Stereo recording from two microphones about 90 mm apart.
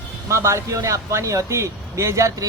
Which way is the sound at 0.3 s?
35° right (ahead or behind).